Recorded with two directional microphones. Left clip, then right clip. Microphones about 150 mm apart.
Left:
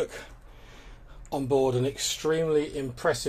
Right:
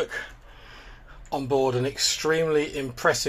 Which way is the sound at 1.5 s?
25° left (ahead or behind).